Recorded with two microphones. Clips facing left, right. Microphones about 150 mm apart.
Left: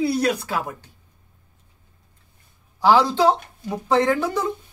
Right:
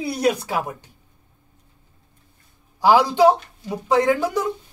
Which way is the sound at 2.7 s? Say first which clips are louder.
Right 1 dB; 15° right (ahead or behind).